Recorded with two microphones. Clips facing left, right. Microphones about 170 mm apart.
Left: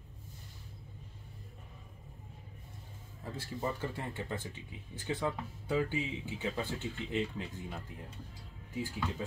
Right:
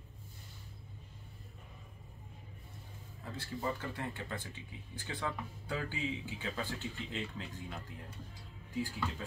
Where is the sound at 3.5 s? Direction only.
25° left (ahead or behind).